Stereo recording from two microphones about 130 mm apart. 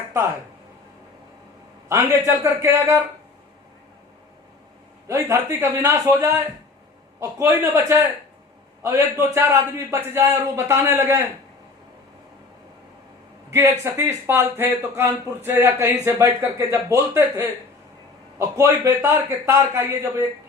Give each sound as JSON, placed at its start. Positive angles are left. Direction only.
{"t": 1.9, "sound": "a man's voice", "side_deg": -20}
{"t": 5.0, "sound": "a man's voice", "side_deg": -20}
{"t": 13.5, "sound": "a man's voice", "side_deg": -20}